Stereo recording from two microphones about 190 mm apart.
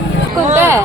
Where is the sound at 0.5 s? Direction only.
15° right (ahead or behind).